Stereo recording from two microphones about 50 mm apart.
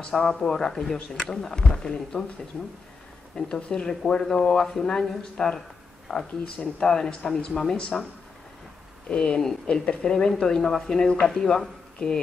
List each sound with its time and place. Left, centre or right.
0.2 s speech: centre
3.3 s speech: centre
9.1 s speech: centre